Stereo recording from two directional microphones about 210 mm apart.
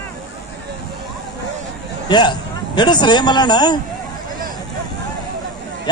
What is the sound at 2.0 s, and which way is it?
A man's voice, 20° left (ahead or behind).